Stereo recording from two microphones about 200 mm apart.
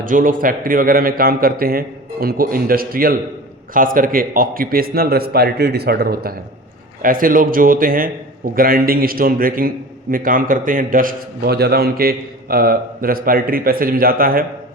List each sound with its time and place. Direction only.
0.0 s a man's voice: 45° right (ahead or behind)